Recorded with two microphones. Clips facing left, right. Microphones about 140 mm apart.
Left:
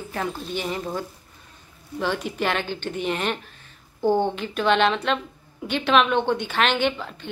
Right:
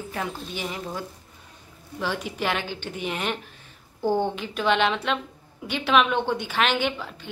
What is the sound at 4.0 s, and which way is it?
Speech, 15° left (ahead or behind).